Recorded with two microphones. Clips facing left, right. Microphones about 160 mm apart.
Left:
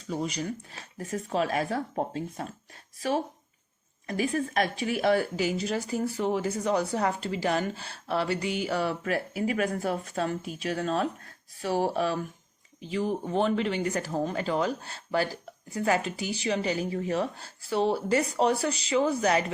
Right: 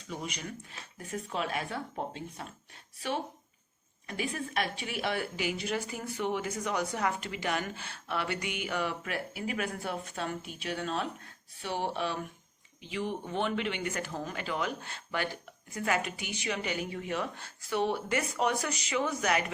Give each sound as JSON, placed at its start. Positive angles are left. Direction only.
{"t": 0.1, "sound": "speech", "side_deg": 35}
{"t": 4.0, "sound": "speech", "side_deg": 40}